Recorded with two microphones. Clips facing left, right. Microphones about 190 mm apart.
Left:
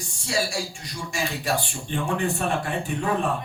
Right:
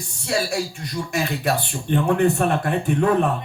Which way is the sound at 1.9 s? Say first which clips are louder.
Right 8 dB; 60° right (ahead or behind).